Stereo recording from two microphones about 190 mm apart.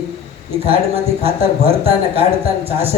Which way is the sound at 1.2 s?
30° right (ahead or behind).